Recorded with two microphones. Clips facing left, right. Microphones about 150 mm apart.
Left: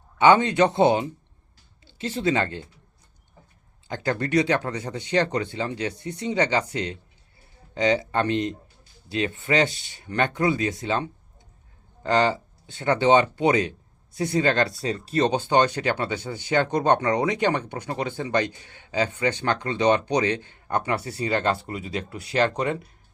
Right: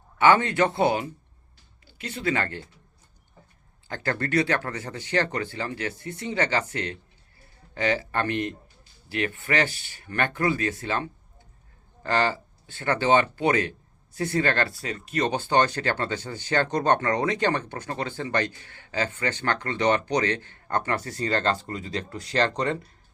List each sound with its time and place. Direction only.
0.2 s speech: 20° left (ahead or behind)
3.8 s speech: 15° left (ahead or behind)
15.3 s speech: 15° left (ahead or behind)